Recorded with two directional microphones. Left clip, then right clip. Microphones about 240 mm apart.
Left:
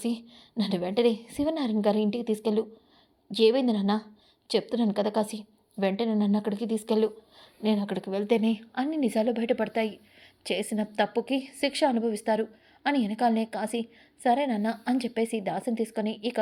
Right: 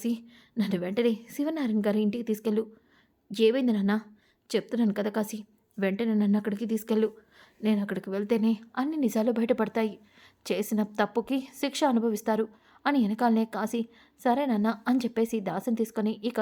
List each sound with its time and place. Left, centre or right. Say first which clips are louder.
0.2 s a woman's voice: left 1 dB; centre